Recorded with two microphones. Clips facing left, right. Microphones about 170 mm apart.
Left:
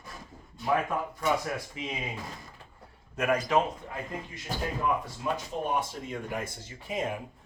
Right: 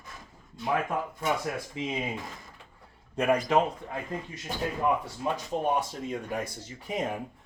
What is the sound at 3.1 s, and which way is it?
Speech, 30° right (ahead or behind).